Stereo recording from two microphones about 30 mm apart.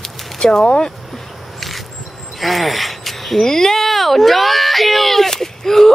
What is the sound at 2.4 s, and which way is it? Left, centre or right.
Speech, centre.